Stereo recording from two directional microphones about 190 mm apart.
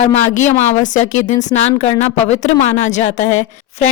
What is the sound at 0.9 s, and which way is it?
A woman's voice, 40° left (ahead or behind).